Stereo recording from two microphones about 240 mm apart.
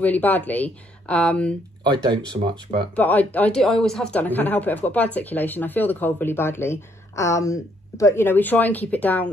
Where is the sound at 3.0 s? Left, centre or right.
Centre.